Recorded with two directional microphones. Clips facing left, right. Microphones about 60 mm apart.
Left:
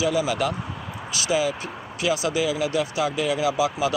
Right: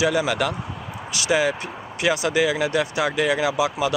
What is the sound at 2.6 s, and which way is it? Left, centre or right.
Speech, right.